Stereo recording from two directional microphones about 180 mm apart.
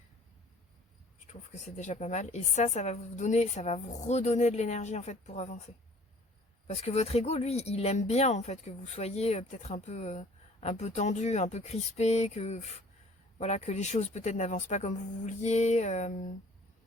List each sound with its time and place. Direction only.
1.3 s speech: 45° left (ahead or behind)
6.7 s speech: 35° left (ahead or behind)